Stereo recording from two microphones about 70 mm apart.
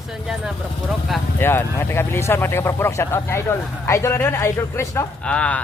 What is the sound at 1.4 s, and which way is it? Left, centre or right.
Speech, left.